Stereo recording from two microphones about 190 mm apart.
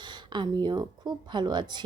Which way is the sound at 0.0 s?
25° right (ahead or behind).